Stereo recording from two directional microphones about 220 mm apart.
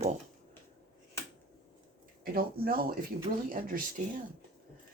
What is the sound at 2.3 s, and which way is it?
Speech, 45° right (ahead or behind).